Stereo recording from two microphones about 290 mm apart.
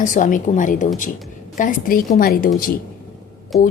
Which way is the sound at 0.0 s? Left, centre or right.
Left.